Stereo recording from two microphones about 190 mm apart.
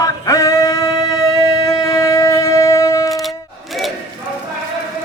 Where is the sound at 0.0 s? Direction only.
20° left (ahead or behind).